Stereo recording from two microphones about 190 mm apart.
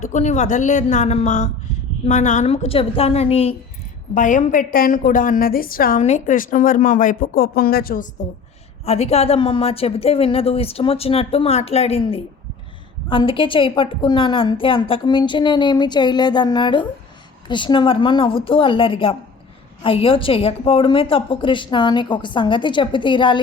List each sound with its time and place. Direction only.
0.0 s a woman's voice: 40° left (ahead or behind)
8.8 s a woman's voice: 35° left (ahead or behind)